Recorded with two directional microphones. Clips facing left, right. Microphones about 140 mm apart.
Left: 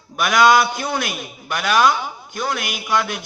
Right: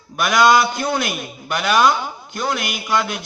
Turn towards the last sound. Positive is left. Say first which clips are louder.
# right 1 dB
turn(degrees=5)  # may be behind; listen again after turning